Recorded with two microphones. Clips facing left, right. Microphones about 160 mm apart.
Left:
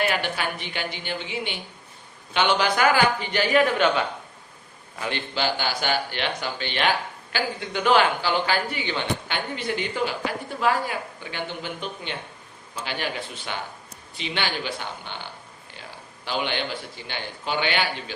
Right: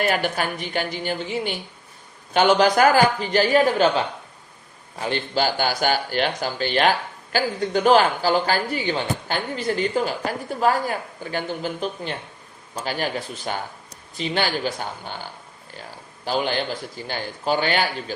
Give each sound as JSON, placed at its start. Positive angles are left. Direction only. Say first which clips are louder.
{"t": 0.1, "sound": "a woman's voice", "louder": "right 4 dB", "side_deg": -45}